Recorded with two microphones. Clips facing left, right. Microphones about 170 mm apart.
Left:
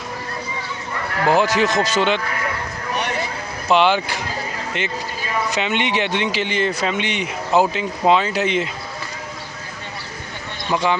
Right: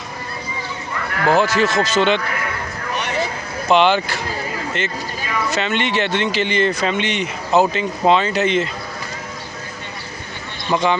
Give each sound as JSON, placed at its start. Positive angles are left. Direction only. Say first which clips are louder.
{"t": 1.2, "sound": "speech", "louder": "right 1 dB", "side_deg": 15}
{"t": 3.7, "sound": "speech", "louder": "right 2 dB", "side_deg": 5}
{"t": 5.5, "sound": "speech", "louder": "right 2 dB", "side_deg": 15}
{"t": 10.7, "sound": "speech", "louder": "right 2 dB", "side_deg": 5}